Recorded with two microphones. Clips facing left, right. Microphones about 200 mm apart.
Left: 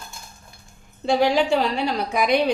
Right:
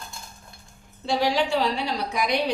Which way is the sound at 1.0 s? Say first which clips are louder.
Left 5 dB; 50° left (ahead or behind).